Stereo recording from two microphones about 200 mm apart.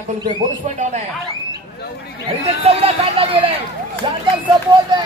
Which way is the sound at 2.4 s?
30° right (ahead or behind).